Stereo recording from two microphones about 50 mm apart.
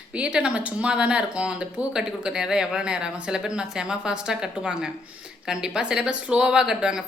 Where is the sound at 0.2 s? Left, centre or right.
Centre.